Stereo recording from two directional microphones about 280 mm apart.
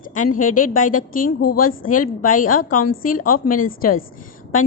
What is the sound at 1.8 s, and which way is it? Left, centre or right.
Speech, left.